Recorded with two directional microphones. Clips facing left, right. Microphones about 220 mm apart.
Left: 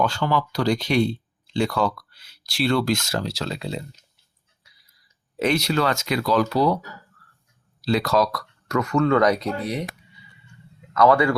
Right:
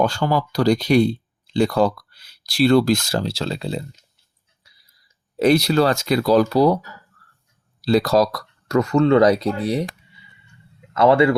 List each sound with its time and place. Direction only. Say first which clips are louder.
0.0 s speech: right 3 dB; 40° right (ahead or behind)
5.4 s speech: right 6 dB; 35° right (ahead or behind)
7.8 s speech: right 4 dB; 35° right (ahead or behind)
10.9 s a man's voice: right 3 dB; 25° right (ahead or behind)